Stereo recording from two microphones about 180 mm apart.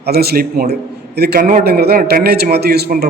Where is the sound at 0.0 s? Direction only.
60° right (ahead or behind).